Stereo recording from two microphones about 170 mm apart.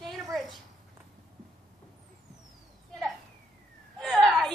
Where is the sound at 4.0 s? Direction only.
Centre (ahead or behind).